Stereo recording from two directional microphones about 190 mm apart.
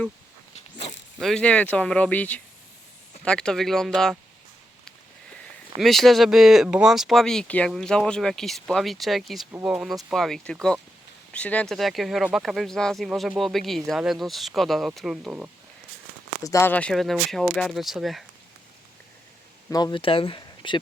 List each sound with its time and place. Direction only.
0.5 s dog: 35° left (ahead or behind)
1.2 s speech: 5° left (ahead or behind)
5.8 s speech: centre (ahead or behind)
16.4 s speech: 15° left (ahead or behind); by 18.3 s centre (ahead or behind)
19.7 s speech: 25° left (ahead or behind)